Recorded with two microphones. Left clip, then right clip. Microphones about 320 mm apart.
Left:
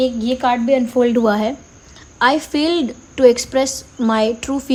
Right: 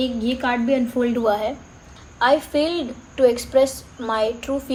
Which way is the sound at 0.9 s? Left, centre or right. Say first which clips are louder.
Left 5 dB; left.